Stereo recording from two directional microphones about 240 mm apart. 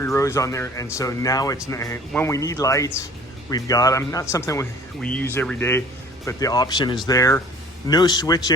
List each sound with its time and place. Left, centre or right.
0.0 s speech: centre